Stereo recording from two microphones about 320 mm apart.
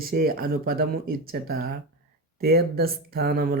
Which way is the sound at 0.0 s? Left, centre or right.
Right.